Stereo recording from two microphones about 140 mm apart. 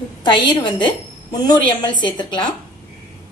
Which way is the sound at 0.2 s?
35° left (ahead or behind).